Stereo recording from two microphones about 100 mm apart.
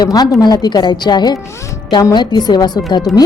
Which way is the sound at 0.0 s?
40° left (ahead or behind).